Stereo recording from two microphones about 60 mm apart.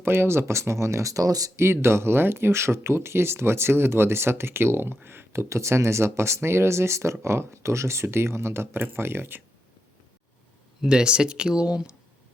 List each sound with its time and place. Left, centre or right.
0.0 s speech: right
1.5 s speech: right
10.8 s speech: centre